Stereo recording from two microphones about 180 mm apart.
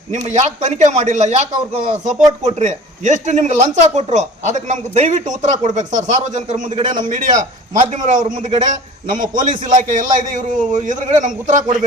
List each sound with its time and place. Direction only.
0.1 s a man's voice: 40° right (ahead or behind)